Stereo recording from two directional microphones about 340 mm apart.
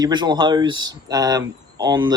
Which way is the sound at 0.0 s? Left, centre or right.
Centre.